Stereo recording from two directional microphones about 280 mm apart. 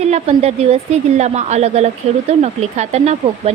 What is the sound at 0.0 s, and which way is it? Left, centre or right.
A woman's voice, right.